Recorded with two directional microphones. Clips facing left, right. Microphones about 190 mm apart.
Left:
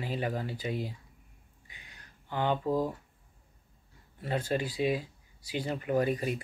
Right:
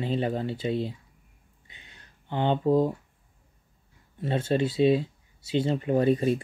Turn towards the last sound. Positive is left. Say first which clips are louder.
# right 6 dB
turn(degrees=-30)  # may be behind; listen again after turning